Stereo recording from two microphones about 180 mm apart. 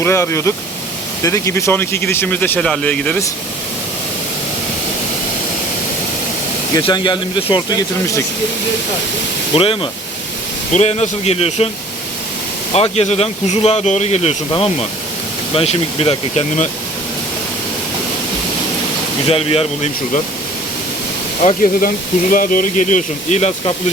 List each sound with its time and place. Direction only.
0.0 s speech: 15° left (ahead or behind)
6.7 s speech: 25° left (ahead or behind)
9.6 s speech: 30° left (ahead or behind)
12.7 s speech: 35° left (ahead or behind)
19.3 s speech: 35° left (ahead or behind)
21.4 s speech: 50° left (ahead or behind)